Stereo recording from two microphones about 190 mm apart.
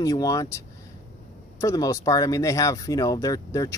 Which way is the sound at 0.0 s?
15° left (ahead or behind).